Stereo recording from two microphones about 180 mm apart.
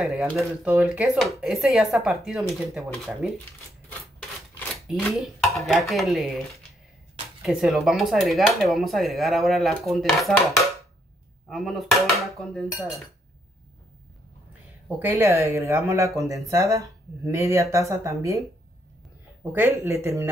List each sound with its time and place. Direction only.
0.0 s speech: centre (ahead or behind)
5.2 s speech: centre (ahead or behind)
11.4 s speech: centre (ahead or behind)
15.0 s speech: 10° right (ahead or behind)
19.5 s speech: 15° right (ahead or behind)